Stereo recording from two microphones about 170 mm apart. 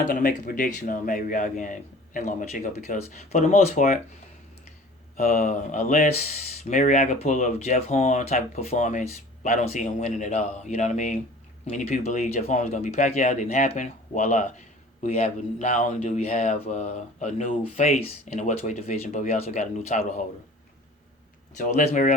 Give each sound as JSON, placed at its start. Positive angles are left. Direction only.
{"t": 0.1, "sound": "speech", "side_deg": 55}
{"t": 5.1, "sound": "speech", "side_deg": 50}
{"t": 21.6, "sound": "speech", "side_deg": 45}